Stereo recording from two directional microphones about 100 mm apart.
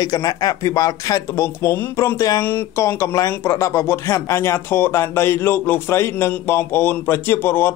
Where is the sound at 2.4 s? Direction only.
25° left (ahead or behind).